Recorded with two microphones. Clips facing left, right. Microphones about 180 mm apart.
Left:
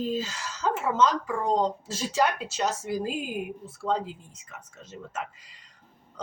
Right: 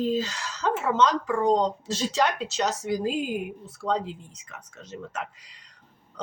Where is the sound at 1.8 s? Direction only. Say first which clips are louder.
Right 4 dB; 75° right (ahead or behind).